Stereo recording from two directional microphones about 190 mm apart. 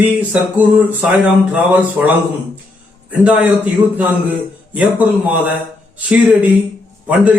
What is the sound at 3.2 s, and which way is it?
Speech, 5° right (ahead or behind).